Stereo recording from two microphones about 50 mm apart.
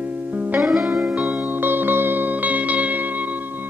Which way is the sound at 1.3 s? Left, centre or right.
Right.